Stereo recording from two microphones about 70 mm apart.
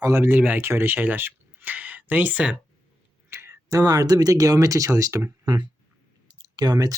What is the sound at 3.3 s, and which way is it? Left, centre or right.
Speech, right.